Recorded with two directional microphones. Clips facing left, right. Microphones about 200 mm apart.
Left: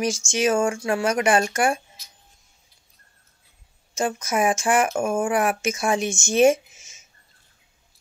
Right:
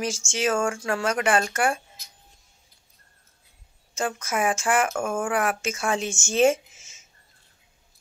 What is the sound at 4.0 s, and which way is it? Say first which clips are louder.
Speech: left 3 dB; 20° left (ahead or behind).